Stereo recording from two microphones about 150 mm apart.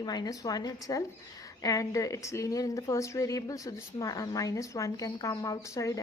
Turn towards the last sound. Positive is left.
turn(degrees=25)  # may be behind; listen again after turning